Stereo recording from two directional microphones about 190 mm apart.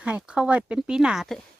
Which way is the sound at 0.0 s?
5° right (ahead or behind).